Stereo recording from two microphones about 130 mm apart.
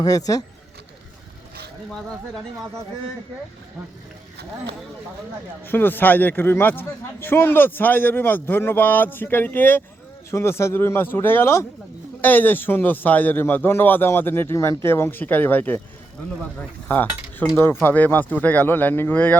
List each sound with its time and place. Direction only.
5.6 s a man's voice: 15° left (ahead or behind)